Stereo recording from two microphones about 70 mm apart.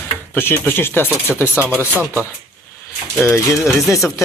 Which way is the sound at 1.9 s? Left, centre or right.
Right.